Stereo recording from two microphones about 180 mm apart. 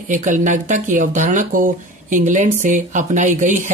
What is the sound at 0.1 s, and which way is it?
Speech, 45° right (ahead or behind).